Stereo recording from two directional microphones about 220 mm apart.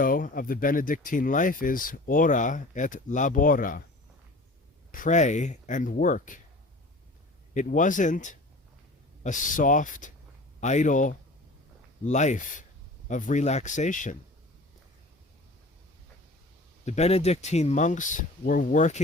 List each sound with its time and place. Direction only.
0.0 s speech: 40° left (ahead or behind)
4.9 s speech: 35° left (ahead or behind)
7.5 s speech: 35° left (ahead or behind)
16.8 s speech: 30° left (ahead or behind)